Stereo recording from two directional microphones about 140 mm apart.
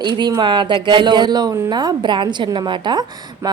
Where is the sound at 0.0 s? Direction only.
30° right (ahead or behind).